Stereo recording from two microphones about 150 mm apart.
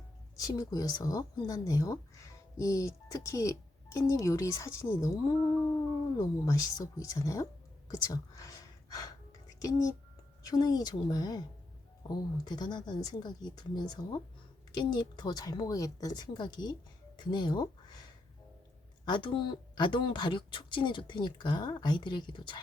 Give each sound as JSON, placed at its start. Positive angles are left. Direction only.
{"t": 0.3, "sound": "speech", "side_deg": 25}
{"t": 6.4, "sound": "speech", "side_deg": 25}
{"t": 7.9, "sound": "whispering", "side_deg": 25}
{"t": 9.6, "sound": "speech", "side_deg": 25}
{"t": 19.0, "sound": "speech", "side_deg": 35}